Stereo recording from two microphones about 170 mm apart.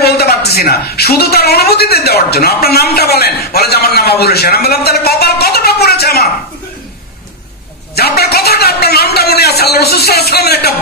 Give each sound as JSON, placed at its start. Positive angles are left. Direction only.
{"t": 0.0, "sound": "a woman's voice", "side_deg": 70}
{"t": 7.9, "sound": "a man's voice", "side_deg": 70}